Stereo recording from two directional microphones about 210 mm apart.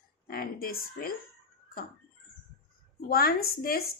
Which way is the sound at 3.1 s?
45° left (ahead or behind).